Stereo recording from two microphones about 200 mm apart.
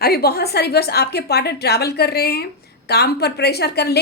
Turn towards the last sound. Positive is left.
turn(degrees=55)  # may be behind; listen again after turning